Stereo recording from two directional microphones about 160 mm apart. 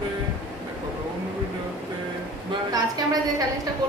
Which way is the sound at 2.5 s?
25° right (ahead or behind).